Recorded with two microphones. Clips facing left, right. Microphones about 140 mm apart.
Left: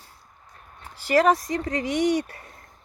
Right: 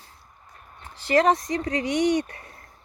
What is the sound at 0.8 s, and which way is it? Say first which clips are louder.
Speech: even; 10° left (ahead or behind).